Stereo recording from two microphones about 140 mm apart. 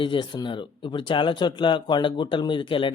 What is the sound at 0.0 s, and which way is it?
Speech, 35° left (ahead or behind).